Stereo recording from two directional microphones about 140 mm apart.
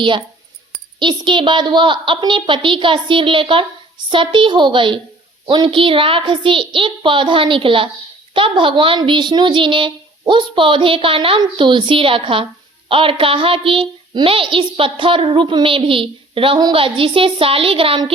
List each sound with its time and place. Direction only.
0.9 s a child's voice: 35° right (ahead or behind)